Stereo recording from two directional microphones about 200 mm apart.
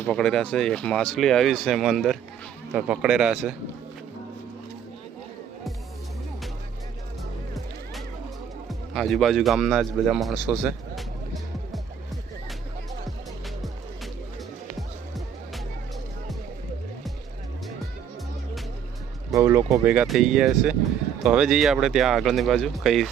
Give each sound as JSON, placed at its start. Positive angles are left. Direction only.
{"t": 0.0, "sound": "a man's voice", "side_deg": 5}
{"t": 8.9, "sound": "a man's voice", "side_deg": 0}
{"t": 19.3, "sound": "a man's voice", "side_deg": -15}